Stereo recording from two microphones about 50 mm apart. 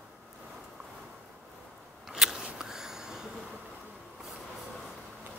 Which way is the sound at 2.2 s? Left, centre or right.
Centre.